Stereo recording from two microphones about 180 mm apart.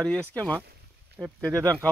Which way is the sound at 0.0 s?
5° left (ahead or behind).